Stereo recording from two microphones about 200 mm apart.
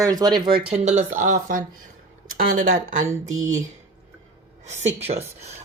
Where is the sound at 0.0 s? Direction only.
20° right (ahead or behind); by 3.6 s 35° right (ahead or behind).